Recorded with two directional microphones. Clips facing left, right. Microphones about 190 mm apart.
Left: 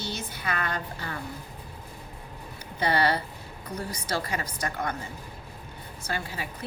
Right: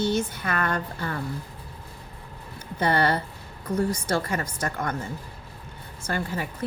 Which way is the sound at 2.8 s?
50° right (ahead or behind).